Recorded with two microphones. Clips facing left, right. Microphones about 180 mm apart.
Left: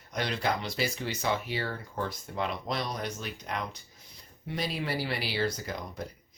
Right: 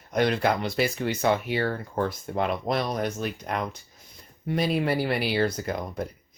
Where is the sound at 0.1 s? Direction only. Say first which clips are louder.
Right 7 dB; 55° right (ahead or behind).